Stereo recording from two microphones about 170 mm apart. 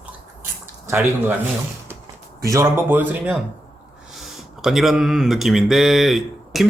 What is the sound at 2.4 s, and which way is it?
Speech, 15° right (ahead or behind).